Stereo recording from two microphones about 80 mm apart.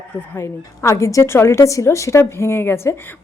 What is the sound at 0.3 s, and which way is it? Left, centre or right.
A woman's voice, left.